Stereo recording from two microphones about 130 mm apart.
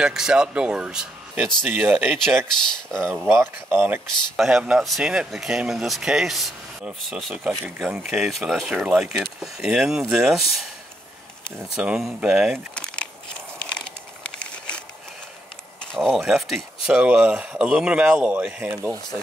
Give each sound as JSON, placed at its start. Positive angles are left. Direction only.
{"t": 0.0, "sound": "speech", "side_deg": -5}
{"t": 2.9, "sound": "speech", "side_deg": 5}
{"t": 3.3, "sound": "speech", "side_deg": -20}
{"t": 4.4, "sound": "speech", "side_deg": -5}
{"t": 11.7, "sound": "speech", "side_deg": -5}
{"t": 12.7, "sound": "a sound", "side_deg": 10}
{"t": 15.9, "sound": "speech", "side_deg": 0}